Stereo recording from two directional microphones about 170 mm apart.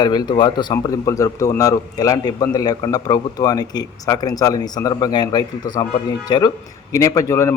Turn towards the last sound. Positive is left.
turn(degrees=15)  # may be behind; listen again after turning